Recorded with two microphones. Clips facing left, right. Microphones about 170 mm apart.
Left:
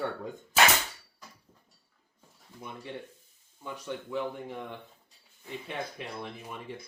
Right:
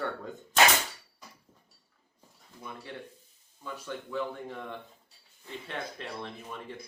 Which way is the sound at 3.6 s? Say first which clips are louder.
Left 1 dB; 15° left (ahead or behind).